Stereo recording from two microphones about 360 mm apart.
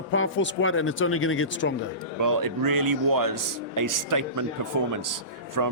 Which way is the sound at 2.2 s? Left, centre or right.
Right.